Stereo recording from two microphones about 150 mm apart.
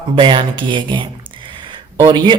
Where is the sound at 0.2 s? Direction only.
30° right (ahead or behind).